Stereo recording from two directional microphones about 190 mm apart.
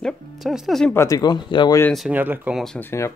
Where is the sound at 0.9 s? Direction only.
15° left (ahead or behind).